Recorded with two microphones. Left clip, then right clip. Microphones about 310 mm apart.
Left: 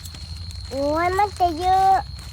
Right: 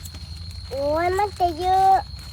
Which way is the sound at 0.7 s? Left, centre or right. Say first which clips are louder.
Left 1 dB; left.